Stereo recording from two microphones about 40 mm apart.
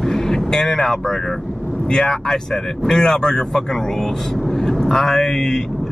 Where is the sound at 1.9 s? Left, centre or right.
Centre.